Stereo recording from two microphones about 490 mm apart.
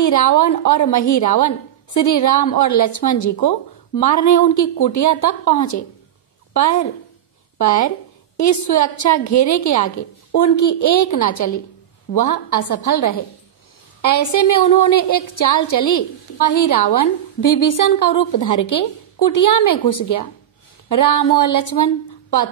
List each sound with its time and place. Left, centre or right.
0.0 s a woman's voice: left
6.5 s a woman's voice: left